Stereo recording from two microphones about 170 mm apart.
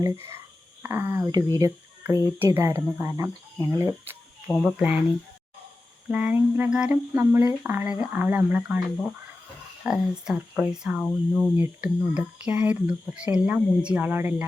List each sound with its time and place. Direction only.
0.0 s speech: 15° right (ahead or behind)
4.4 s speech: centre (ahead or behind)
6.1 s speech: 5° right (ahead or behind)
9.8 s speech: 5° right (ahead or behind)